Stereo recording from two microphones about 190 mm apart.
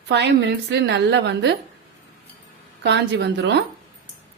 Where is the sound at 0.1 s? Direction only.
65° right (ahead or behind).